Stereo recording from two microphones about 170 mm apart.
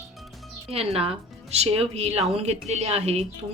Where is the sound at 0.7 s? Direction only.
35° right (ahead or behind).